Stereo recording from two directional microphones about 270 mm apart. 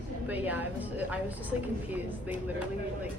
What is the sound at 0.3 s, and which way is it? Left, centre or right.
Speech, centre.